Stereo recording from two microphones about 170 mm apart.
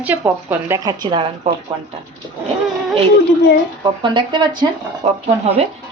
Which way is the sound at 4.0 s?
25° right (ahead or behind).